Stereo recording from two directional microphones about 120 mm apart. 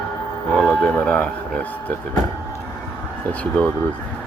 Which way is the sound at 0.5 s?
10° left (ahead or behind).